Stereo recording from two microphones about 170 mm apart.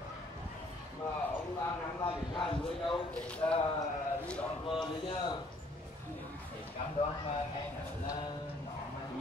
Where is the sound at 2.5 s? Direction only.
30° left (ahead or behind).